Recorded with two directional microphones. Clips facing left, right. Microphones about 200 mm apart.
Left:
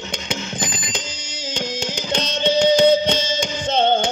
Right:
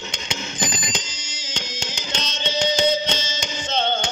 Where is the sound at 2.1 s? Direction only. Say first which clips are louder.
Left 8 dB; 55° left (ahead or behind).